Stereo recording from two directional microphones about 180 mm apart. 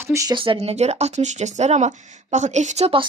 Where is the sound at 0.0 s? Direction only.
15° right (ahead or behind).